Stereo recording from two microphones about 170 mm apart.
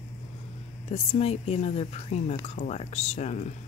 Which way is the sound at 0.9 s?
35° left (ahead or behind).